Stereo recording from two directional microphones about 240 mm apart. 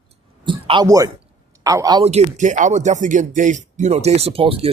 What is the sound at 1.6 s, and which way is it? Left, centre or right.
Speech, centre.